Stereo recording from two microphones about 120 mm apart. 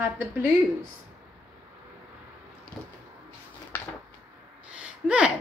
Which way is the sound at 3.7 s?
15° left (ahead or behind).